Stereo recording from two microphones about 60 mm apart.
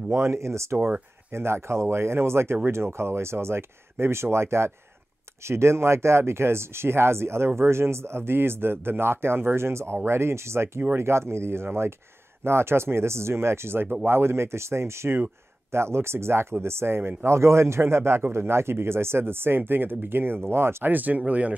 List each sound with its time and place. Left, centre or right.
0.1 s speech: right
20.9 s speech: right